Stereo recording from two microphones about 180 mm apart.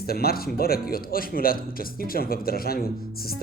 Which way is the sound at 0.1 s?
55° left (ahead or behind).